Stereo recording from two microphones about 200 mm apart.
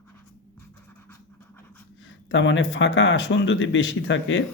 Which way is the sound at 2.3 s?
65° left (ahead or behind).